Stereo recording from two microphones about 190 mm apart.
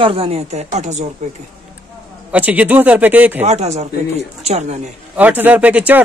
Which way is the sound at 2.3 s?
10° right (ahead or behind).